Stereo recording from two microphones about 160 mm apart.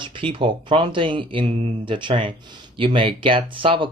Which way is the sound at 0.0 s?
30° right (ahead or behind).